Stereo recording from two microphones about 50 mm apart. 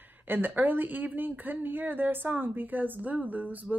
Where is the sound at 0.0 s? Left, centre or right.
Right.